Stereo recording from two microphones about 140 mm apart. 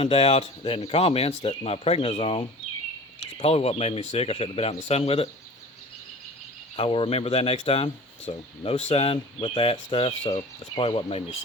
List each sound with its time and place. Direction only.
0.0 s speech: 40° left (ahead or behind)
6.7 s speech: 40° left (ahead or behind)